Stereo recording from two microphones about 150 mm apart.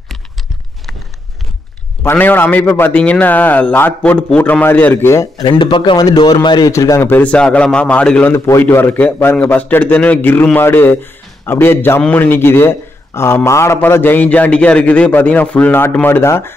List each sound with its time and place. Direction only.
2.0 s a man's voice: 15° left (ahead or behind)
5.5 s a man's voice: 30° left (ahead or behind); by 16.5 s 15° left (ahead or behind)